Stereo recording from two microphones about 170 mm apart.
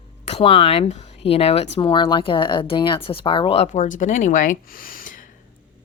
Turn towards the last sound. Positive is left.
turn(degrees=55)  # may be behind; listen again after turning